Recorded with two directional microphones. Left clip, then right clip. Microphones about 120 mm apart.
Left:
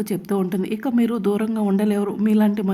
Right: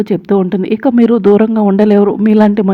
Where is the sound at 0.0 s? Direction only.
45° right (ahead or behind).